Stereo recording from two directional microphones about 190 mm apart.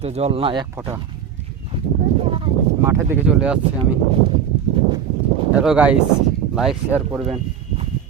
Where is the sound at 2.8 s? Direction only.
10° right (ahead or behind).